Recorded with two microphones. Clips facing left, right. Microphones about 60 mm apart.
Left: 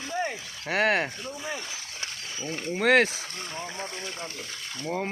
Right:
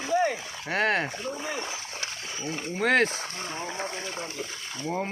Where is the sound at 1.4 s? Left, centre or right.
Right.